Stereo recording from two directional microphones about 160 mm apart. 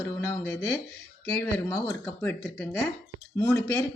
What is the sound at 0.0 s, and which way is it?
A woman's voice, 15° left (ahead or behind).